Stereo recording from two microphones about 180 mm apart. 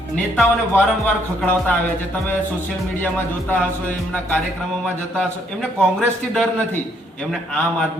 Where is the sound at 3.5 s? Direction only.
10° left (ahead or behind).